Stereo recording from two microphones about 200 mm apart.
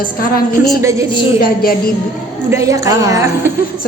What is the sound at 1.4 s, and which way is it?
Speech, 50° left (ahead or behind).